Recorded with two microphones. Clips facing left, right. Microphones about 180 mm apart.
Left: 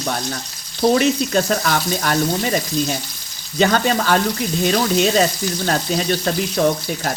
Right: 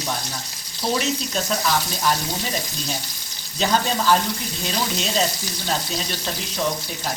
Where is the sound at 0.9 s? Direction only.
65° left (ahead or behind).